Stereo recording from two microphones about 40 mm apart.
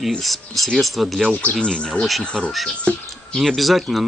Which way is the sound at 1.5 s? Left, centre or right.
Left.